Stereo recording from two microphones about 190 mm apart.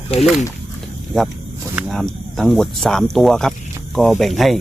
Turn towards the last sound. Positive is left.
turn(degrees=0)  # may be behind; listen again after turning